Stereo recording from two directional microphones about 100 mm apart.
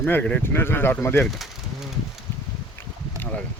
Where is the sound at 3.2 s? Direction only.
15° left (ahead or behind).